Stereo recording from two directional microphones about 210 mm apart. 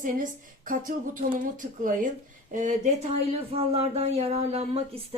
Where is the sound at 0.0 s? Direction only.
40° right (ahead or behind).